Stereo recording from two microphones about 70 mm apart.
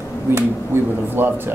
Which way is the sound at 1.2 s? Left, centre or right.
Right.